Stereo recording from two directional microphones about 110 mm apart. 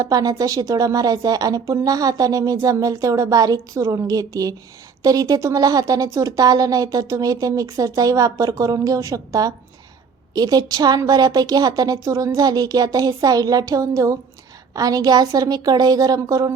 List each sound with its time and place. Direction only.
0.0 s a woman's voice: 35° right (ahead or behind)